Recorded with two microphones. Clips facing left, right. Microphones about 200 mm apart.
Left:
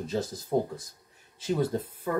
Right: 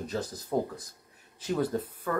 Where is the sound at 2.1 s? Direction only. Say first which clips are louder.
Left 2 dB; 20° left (ahead or behind).